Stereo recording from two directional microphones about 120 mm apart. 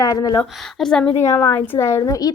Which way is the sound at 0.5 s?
5° left (ahead or behind).